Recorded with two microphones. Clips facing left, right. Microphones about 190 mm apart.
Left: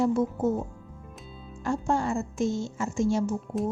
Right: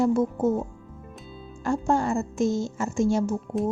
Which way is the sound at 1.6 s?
45° right (ahead or behind).